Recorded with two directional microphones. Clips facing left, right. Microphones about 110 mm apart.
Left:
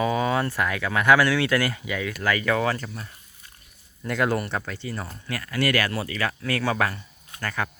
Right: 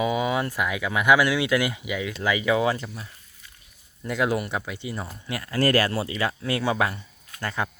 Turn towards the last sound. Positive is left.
turn(degrees=-20)  # may be behind; listen again after turning